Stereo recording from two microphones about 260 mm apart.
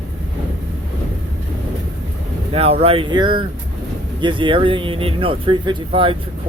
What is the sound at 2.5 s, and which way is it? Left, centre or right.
Speech, right.